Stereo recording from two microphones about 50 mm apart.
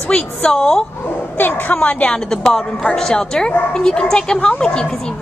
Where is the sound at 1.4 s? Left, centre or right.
Left.